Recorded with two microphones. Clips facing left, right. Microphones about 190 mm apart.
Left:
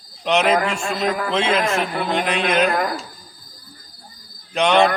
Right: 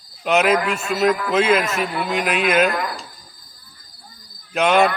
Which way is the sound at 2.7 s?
50° left (ahead or behind).